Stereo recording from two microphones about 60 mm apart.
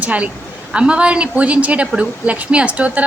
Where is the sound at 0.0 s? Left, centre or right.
Right.